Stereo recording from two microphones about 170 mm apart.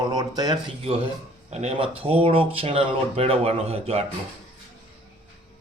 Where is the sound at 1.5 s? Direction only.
40° right (ahead or behind).